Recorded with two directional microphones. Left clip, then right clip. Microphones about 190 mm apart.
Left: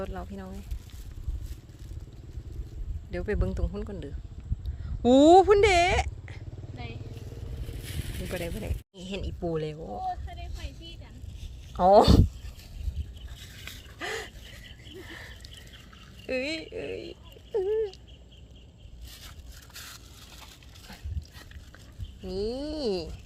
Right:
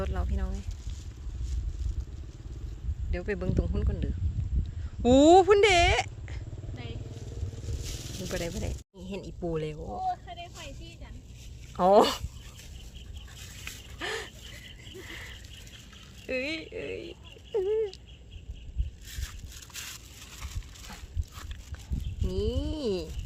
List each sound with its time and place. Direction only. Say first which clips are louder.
0.0 s speech: right 1 dB; 5° right (ahead or behind)
3.1 s speech: left 1 dB; 10° left (ahead or behind)
8.2 s speech: even; centre (ahead or behind)
10.1 s vehicle: right 2 dB; 30° right (ahead or behind)
11.8 s speech: left 2 dB; 5° right (ahead or behind)
13.4 s dog: right 1 dB; 45° right (ahead or behind)
14.0 s a sound: even; centre (ahead or behind)
16.2 s speech: left 1 dB; 5° left (ahead or behind)
19.7 s crushing: right 3 dB; 50° right (ahead or behind)
22.3 s speech: left 1 dB; centre (ahead or behind)